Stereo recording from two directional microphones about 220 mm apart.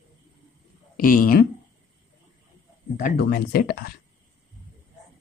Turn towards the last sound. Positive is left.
turn(degrees=40)  # may be behind; listen again after turning